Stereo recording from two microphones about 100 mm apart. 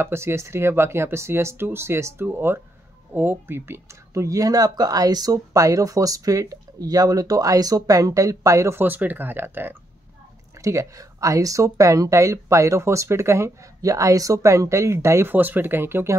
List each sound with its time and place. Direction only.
0.0 s speech: 25° right (ahead or behind)
10.6 s speech: 30° right (ahead or behind)
15.3 s speech: 20° right (ahead or behind)